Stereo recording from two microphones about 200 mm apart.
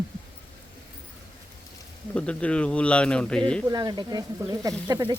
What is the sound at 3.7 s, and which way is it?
Speech, 20° right (ahead or behind).